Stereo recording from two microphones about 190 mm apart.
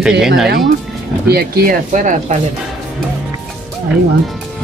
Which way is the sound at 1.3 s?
50° right (ahead or behind).